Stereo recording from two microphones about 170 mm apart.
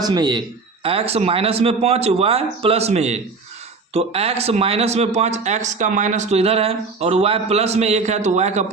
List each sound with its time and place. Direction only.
0.0 s speech: 25° right (ahead or behind); by 8.6 s 45° right (ahead or behind)